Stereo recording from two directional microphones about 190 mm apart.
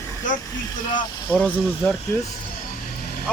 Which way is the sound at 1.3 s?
5° left (ahead or behind).